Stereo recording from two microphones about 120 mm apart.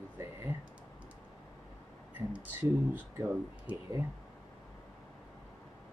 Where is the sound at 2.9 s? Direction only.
15° right (ahead or behind).